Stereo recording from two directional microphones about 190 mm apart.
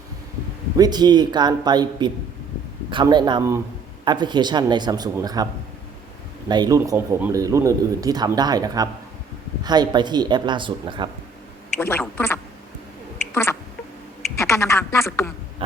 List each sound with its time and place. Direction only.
0.8 s speech: 20° right (ahead or behind)
6.5 s speech: 20° right (ahead or behind)
11.8 s speech: 10° left (ahead or behind)
13.3 s a sound: 15° left (ahead or behind)